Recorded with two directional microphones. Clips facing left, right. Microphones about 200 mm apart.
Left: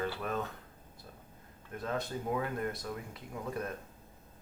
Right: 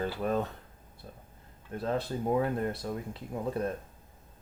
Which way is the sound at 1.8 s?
30° right (ahead or behind).